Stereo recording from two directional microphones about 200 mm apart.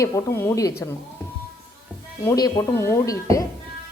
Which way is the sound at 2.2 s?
15° left (ahead or behind).